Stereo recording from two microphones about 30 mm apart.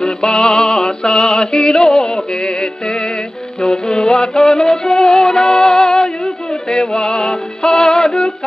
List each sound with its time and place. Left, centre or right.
0.0 s music: left
3.6 s music: centre